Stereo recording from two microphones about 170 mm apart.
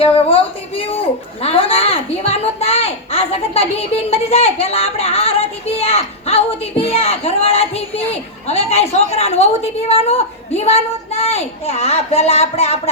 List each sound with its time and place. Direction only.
0.0 s a woman's voice: 35° left (ahead or behind)